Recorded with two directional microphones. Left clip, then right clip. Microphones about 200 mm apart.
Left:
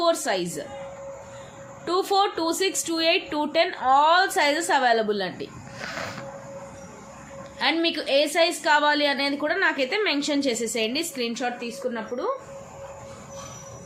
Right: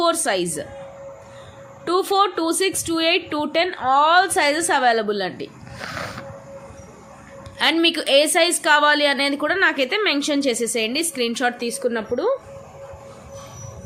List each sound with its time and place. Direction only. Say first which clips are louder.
0.0 s a woman's voice: right 3 dB; 35° right (ahead or behind)
1.8 s a woman's voice: right 4 dB; 30° right (ahead or behind)
7.6 s a woman's voice: right 5 dB; 35° right (ahead or behind); by 12.3 s 65° right (ahead or behind)